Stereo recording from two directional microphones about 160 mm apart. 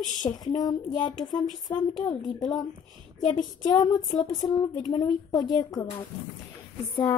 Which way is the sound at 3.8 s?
30° left (ahead or behind).